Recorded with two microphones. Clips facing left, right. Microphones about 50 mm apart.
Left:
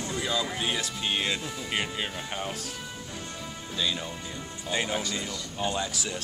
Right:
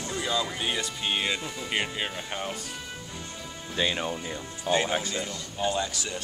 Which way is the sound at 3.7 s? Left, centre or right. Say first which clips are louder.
Right 3 dB; right.